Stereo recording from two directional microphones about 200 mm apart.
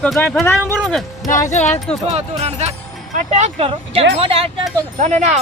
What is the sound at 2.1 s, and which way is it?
Speech, 35° right (ahead or behind).